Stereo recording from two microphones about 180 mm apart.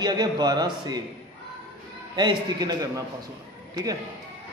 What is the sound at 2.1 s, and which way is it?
Speech, 25° right (ahead or behind).